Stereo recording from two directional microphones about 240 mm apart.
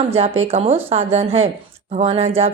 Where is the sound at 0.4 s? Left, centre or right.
Right.